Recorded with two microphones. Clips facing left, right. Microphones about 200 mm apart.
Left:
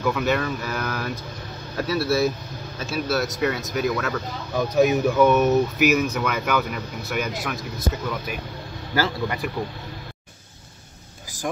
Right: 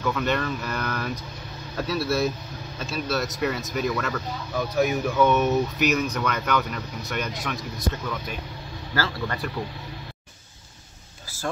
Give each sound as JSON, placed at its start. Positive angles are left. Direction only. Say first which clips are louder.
{"t": 0.0, "sound": "speech", "louder": "left 3 dB", "side_deg": 5}
{"t": 4.7, "sound": "speech", "louder": "left 5 dB", "side_deg": 20}
{"t": 5.1, "sound": "speech", "louder": "left 1 dB", "side_deg": 5}